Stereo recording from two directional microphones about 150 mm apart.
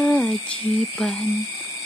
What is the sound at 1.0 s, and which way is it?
Speech, 5° left (ahead or behind).